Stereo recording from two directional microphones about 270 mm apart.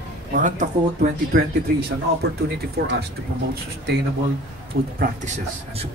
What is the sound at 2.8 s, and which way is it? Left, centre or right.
Speech, right.